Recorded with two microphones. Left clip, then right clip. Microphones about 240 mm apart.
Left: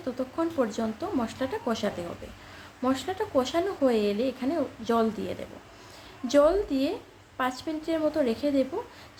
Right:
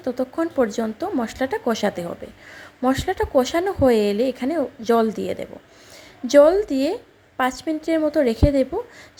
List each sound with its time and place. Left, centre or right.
0.0 s a woman's voice: right